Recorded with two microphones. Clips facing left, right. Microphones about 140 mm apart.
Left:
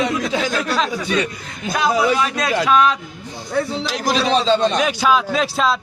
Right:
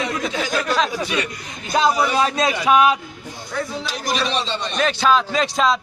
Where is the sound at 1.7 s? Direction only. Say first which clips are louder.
Even; 25° right (ahead or behind).